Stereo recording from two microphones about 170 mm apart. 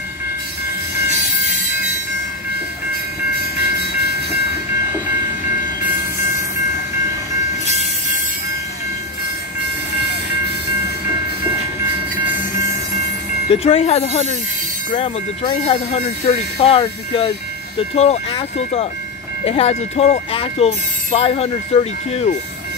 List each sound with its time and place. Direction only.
7.6 s train: 40° right (ahead or behind)
13.5 s speech: 35° left (ahead or behind)